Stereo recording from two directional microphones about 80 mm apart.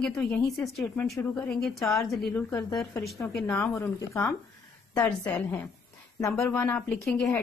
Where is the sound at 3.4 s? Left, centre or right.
Left.